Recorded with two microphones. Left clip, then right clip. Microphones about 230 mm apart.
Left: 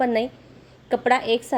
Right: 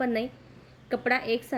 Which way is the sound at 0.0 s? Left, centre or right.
Centre.